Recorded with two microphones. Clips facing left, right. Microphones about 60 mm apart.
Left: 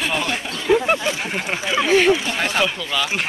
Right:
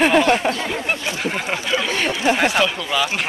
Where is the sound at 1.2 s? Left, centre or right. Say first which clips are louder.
Right 2 dB; centre.